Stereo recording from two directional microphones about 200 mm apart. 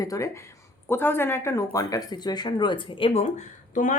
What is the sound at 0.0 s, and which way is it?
A woman's voice, 15° left (ahead or behind).